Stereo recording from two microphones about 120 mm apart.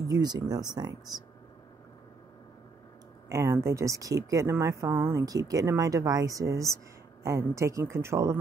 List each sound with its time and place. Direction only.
0.0 s speech: 30° right (ahead or behind)
3.3 s speech: 25° right (ahead or behind)